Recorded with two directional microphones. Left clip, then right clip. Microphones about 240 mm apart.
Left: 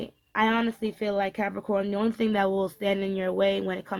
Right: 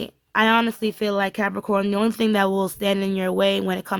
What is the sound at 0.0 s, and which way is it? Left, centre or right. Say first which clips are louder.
Speech: right 5 dB; right.